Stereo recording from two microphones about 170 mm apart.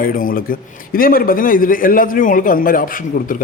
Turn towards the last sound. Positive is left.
turn(degrees=55)  # may be behind; listen again after turning